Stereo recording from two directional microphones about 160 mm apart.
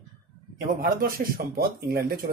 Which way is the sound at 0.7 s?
65° right (ahead or behind).